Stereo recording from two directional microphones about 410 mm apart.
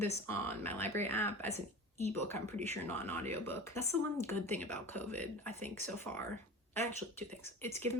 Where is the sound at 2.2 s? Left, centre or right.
Centre.